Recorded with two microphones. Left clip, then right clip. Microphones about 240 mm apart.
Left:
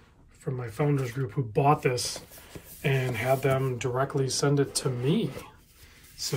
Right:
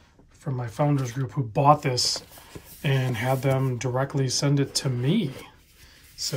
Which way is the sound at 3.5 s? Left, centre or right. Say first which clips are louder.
Right 1 dB; right.